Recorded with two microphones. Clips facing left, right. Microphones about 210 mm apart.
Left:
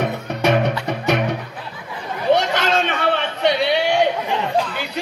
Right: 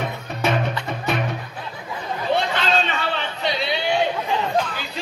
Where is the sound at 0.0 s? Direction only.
70° left (ahead or behind).